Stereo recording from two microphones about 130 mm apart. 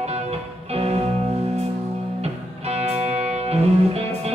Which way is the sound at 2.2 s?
55° right (ahead or behind).